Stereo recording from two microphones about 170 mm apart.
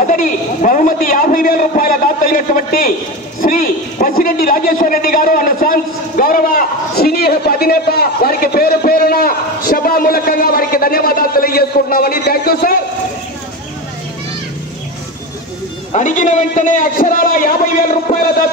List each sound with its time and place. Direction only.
0.0 s a man's voice: 50° left (ahead or behind)
15.9 s a man's voice: 50° left (ahead or behind)